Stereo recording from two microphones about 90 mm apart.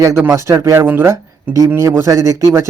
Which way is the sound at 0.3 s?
30° right (ahead or behind).